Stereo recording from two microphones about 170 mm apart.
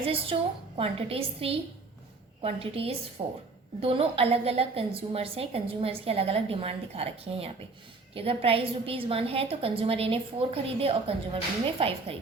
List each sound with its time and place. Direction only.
0.0 s a woman's voice: 35° right (ahead or behind)
3.2 s a woman's voice: 25° right (ahead or behind)